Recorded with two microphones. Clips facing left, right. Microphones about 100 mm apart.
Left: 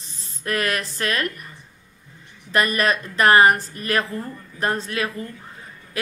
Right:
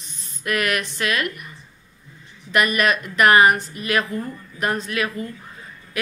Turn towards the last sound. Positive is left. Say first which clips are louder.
# even
turn(degrees=30)  # may be behind; listen again after turning